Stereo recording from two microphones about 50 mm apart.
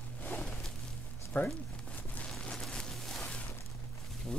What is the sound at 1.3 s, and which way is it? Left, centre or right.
Speech, left.